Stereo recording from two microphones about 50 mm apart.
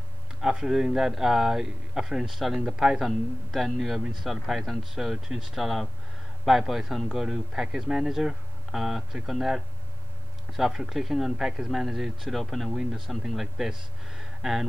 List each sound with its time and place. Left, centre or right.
0.4 s speech: centre
2.6 s speech: centre
3.0 s speech: centre